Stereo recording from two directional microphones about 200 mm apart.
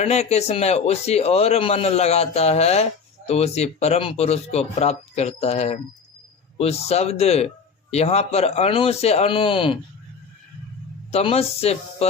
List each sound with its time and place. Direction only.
0.0 s speech: 35° left (ahead or behind)
11.1 s speech: 30° left (ahead or behind)